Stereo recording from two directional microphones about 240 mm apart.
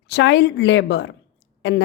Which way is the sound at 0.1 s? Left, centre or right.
Left.